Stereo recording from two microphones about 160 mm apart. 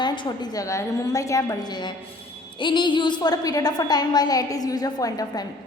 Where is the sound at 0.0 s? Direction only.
25° left (ahead or behind).